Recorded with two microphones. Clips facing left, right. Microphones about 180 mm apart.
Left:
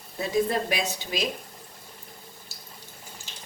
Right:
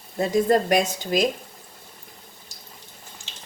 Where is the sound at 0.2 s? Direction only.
50° right (ahead or behind).